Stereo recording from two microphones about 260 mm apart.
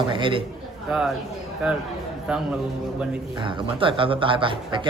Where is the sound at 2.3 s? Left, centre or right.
Centre.